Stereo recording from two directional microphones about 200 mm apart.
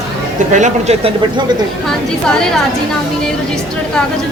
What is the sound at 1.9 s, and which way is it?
Speech, 5° left (ahead or behind).